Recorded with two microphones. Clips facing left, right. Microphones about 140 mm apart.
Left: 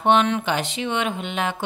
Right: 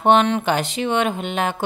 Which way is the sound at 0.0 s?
40° right (ahead or behind).